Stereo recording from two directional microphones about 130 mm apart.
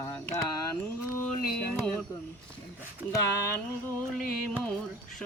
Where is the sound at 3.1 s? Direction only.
25° left (ahead or behind).